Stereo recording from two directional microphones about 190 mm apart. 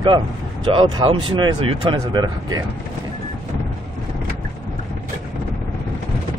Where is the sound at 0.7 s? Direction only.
30° right (ahead or behind).